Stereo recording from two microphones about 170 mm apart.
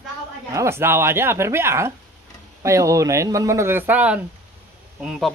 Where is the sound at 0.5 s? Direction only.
15° right (ahead or behind).